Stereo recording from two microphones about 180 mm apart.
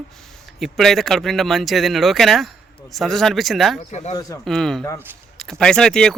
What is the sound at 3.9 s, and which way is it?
Speech, 40° left (ahead or behind).